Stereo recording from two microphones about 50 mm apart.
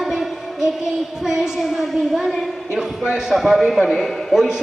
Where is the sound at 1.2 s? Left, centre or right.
Centre.